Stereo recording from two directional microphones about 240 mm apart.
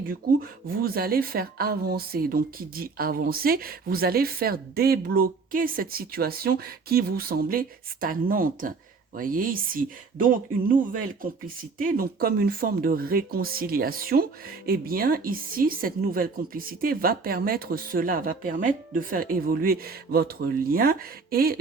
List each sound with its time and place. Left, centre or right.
0.0 s speech: right
11.8 s speech: right